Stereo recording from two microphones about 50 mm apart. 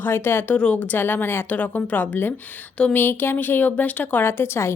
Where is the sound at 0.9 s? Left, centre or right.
Left.